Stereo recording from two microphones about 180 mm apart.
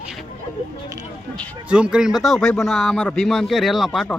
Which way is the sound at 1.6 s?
5° right (ahead or behind).